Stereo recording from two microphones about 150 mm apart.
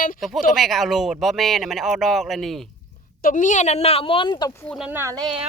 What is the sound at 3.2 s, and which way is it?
A woman's voice, 60° left (ahead or behind).